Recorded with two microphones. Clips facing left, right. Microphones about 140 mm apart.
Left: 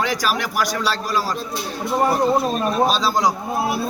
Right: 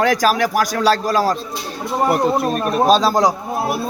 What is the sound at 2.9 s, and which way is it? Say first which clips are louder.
Speech: right 5 dB; 50° right (ahead or behind).